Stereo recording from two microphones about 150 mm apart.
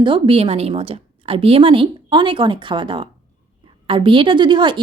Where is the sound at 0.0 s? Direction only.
35° right (ahead or behind).